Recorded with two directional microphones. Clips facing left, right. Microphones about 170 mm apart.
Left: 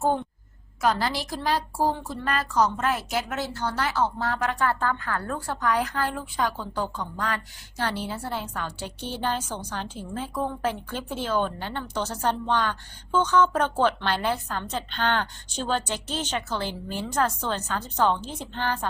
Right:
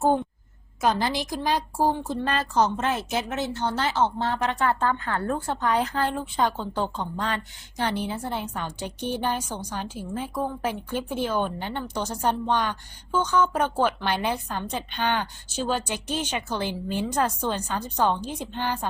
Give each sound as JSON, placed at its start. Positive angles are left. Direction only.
{"t": 0.8, "sound": "a woman's voice", "side_deg": -20}